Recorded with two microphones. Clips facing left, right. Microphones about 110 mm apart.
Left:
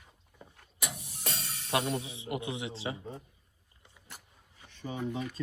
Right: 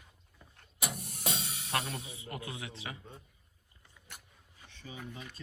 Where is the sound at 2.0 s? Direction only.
25° left (ahead or behind).